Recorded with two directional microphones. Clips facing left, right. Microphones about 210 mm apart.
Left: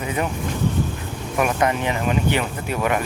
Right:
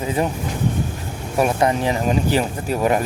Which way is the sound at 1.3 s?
30° right (ahead or behind).